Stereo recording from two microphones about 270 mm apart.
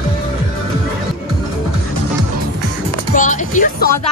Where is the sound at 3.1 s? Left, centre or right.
Left.